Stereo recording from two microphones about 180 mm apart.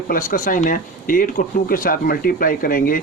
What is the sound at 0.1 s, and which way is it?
Speech, 50° left (ahead or behind).